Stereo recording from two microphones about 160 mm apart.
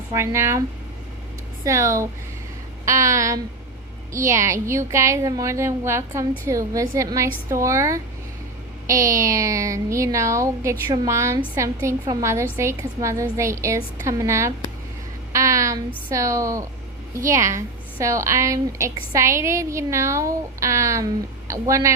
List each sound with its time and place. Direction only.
0.1 s a woman's voice: 15° right (ahead or behind)
1.6 s a woman's voice: 20° right (ahead or behind)
15.3 s a sound: 20° right (ahead or behind)
16.1 s a woman's voice: 20° right (ahead or behind)